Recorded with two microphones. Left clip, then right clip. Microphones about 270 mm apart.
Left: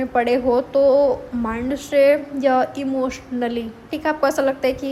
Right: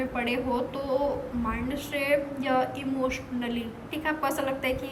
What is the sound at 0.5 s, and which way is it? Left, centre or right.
Speech, left.